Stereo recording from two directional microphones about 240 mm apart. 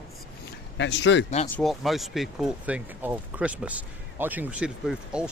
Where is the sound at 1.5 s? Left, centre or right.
Centre.